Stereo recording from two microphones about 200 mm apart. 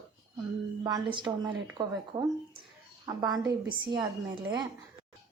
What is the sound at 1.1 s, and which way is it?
Speech, 20° right (ahead or behind).